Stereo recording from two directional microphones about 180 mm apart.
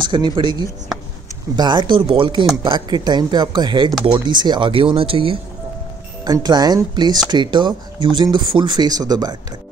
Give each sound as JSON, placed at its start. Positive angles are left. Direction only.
{"t": 0.0, "sound": "speech", "side_deg": -25}